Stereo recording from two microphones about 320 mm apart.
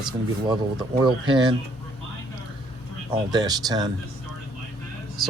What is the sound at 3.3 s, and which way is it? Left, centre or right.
Speech, centre.